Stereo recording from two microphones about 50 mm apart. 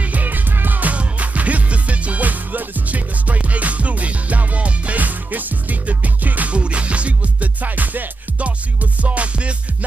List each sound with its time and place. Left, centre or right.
0.1 s music: right